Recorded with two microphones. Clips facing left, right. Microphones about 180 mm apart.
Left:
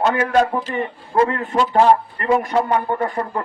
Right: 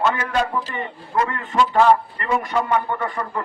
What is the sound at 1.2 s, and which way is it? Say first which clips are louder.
A man's voice: left 2 dB; 50° left (ahead or behind).